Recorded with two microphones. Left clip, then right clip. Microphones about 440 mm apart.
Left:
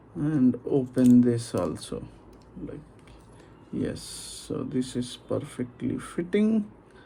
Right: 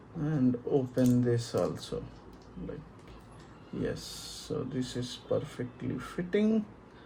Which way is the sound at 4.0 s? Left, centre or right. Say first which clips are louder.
Left 2 dB; centre.